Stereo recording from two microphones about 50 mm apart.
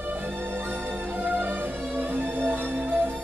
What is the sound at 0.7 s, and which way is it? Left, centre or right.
Music, right.